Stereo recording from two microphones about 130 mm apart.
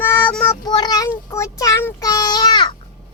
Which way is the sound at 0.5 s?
30° left (ahead or behind).